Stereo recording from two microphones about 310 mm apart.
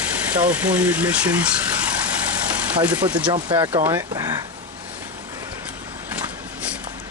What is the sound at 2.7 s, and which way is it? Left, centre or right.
Speech, centre.